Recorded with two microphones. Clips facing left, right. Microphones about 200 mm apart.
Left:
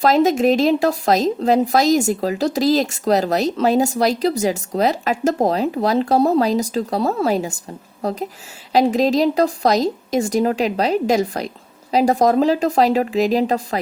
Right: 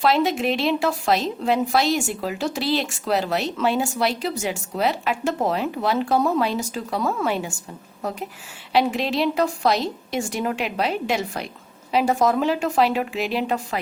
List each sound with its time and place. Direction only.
0.0 s speech: 40° left (ahead or behind)